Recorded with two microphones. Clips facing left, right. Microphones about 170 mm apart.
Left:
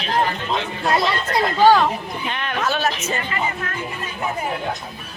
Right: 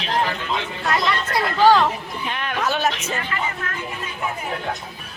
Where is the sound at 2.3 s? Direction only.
5° right (ahead or behind).